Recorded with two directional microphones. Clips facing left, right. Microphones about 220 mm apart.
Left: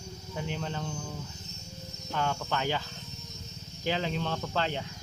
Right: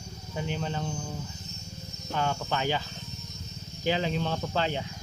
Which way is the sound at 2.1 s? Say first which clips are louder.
Right 2 dB; 25° right (ahead or behind).